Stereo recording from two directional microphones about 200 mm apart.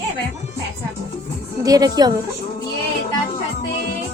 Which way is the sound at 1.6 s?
20° right (ahead or behind).